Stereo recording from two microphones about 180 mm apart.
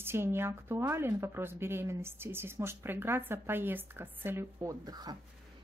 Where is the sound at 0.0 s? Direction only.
15° right (ahead or behind).